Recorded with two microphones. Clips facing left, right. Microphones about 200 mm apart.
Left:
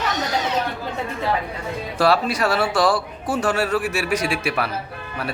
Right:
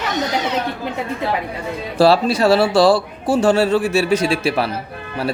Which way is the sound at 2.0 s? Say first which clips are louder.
Right 6 dB; 30° right (ahead or behind).